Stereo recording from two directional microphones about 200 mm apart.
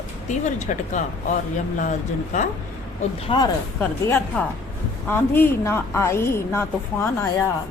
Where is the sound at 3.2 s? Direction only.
25° left (ahead or behind).